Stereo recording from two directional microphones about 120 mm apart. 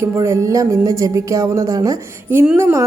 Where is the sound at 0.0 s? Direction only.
25° right (ahead or behind).